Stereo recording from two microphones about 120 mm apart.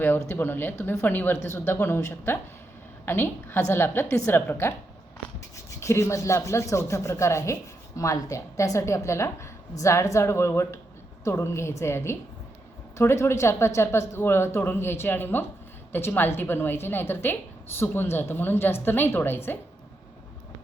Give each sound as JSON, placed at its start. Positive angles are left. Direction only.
{"t": 0.0, "sound": "a woman's voice", "side_deg": 20}